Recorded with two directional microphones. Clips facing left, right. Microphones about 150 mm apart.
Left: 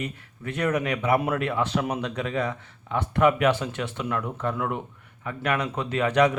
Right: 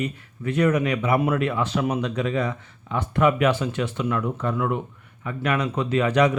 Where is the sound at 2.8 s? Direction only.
60° left (ahead or behind).